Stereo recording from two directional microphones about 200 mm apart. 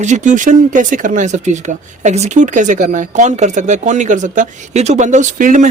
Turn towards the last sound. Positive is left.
turn(degrees=-40)  # may be behind; listen again after turning